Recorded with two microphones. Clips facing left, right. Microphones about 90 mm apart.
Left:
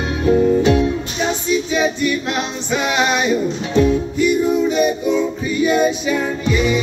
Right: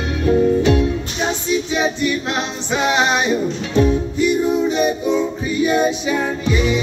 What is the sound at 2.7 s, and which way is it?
Music, 25° right (ahead or behind).